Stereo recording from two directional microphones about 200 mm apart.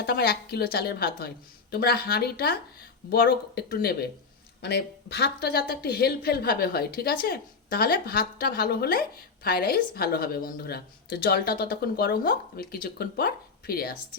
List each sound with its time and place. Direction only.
0.0 s speech: 50° left (ahead or behind)